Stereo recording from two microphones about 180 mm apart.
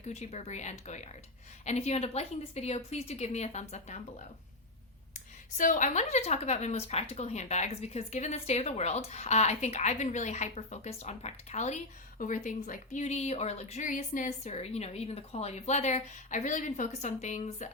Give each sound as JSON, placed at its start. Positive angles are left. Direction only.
{"t": 0.0, "sound": "a woman's voice", "side_deg": 35}
{"t": 5.5, "sound": "a woman's voice", "side_deg": 45}